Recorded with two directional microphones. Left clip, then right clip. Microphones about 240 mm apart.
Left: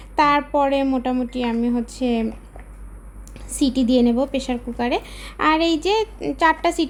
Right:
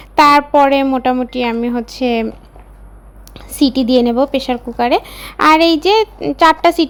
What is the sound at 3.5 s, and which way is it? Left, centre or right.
Speech, centre.